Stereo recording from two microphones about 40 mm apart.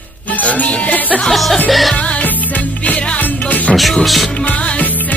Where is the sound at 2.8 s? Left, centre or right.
Left.